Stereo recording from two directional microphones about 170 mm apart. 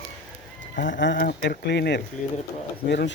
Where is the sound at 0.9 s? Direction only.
90° left.